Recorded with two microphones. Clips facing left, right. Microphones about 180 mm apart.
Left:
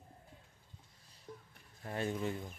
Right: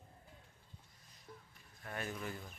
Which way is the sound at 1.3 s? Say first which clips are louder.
Left 5 dB; 15° left (ahead or behind).